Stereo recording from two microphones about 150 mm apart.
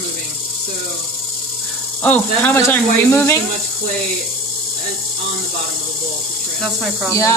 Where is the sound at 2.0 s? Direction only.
10° left (ahead or behind).